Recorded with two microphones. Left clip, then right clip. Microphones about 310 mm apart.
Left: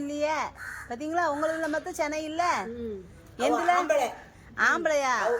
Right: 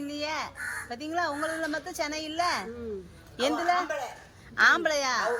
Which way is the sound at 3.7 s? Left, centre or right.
Centre.